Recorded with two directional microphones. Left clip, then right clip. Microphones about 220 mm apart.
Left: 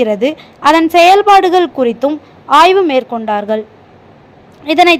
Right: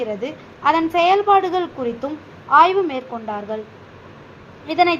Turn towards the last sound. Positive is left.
turn(degrees=50)  # may be behind; listen again after turning